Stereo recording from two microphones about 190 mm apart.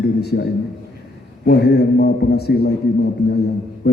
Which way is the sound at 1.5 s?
60° left (ahead or behind).